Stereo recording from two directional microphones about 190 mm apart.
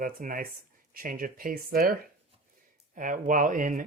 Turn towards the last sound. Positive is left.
turn(degrees=-45)  # may be behind; listen again after turning